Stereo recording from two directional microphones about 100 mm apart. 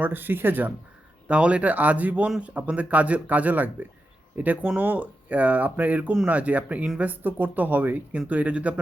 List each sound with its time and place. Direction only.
0.0 s speech: 20° right (ahead or behind)